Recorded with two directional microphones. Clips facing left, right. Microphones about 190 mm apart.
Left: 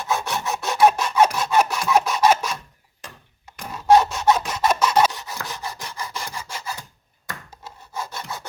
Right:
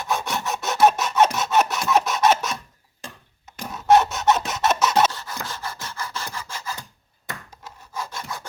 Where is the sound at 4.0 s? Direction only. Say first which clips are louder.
Left 1 dB; centre (ahead or behind).